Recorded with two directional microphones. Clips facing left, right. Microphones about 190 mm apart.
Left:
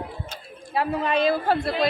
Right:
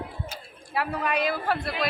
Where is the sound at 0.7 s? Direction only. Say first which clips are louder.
Left 4 dB; 25° left (ahead or behind).